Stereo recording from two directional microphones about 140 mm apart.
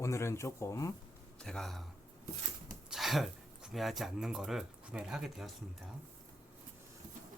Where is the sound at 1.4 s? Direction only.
5° left (ahead or behind).